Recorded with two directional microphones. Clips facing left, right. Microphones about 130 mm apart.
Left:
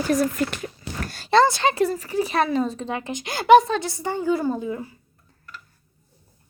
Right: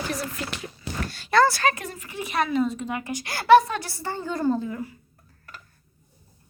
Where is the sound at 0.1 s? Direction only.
45° left (ahead or behind).